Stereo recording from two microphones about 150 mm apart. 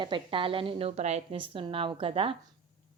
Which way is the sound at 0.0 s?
35° right (ahead or behind).